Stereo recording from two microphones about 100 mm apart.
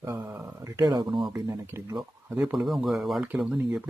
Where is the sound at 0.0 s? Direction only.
30° right (ahead or behind).